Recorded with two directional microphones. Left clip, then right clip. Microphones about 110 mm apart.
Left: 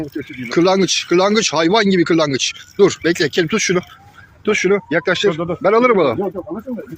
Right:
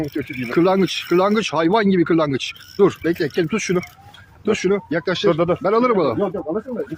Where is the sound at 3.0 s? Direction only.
10° left (ahead or behind).